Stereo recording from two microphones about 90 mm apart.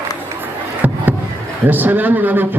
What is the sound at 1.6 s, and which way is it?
Speech, 20° right (ahead or behind).